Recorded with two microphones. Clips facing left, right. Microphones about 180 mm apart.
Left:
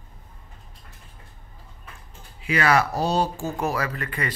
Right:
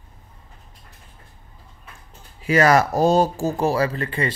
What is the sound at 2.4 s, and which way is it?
Speech, 40° right (ahead or behind).